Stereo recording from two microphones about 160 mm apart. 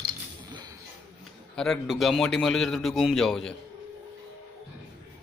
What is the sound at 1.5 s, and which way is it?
A man's voice, centre (ahead or behind).